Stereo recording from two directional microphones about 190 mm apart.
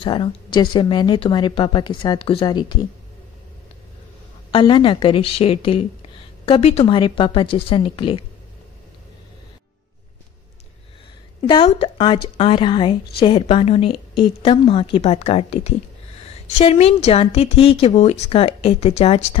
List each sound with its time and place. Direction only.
0.0 s a woman's voice: 25° left (ahead or behind)
4.5 s a woman's voice: 25° left (ahead or behind)
11.4 s a woman's voice: 25° left (ahead or behind)